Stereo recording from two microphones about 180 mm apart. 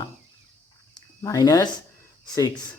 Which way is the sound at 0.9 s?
20° left (ahead or behind).